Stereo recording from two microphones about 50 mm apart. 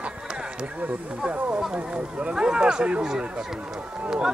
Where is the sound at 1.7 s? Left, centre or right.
Right.